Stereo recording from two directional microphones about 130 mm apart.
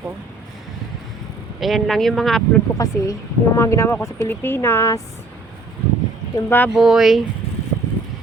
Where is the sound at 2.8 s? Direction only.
25° left (ahead or behind).